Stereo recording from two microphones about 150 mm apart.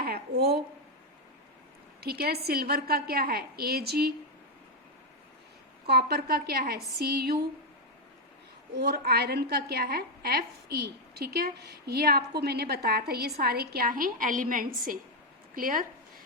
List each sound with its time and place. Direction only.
0.0 s a sound: 90° right
2.0 s a woman's voice: 90° right
5.8 s a woman's voice: 90° right
8.7 s a woman's voice: 90° right; by 15.9 s 70° right (ahead or behind)